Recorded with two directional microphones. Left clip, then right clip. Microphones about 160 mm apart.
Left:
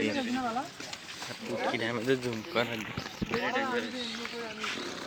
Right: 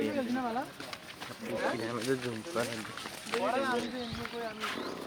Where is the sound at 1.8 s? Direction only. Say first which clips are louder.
Left 3 dB; 45° left (ahead or behind).